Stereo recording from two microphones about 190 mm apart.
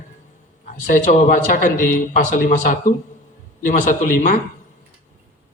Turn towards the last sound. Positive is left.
turn(degrees=45)  # may be behind; listen again after turning